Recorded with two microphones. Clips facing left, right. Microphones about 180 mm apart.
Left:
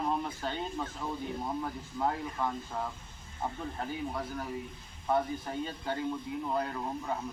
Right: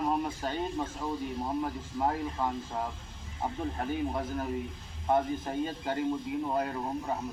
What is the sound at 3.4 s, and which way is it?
Speech, 15° right (ahead or behind).